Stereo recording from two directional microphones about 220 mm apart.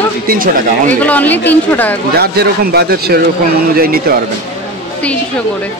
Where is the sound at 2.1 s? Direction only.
45° right (ahead or behind).